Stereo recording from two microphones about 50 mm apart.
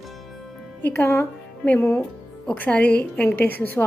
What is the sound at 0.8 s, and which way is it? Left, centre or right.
Speech, left.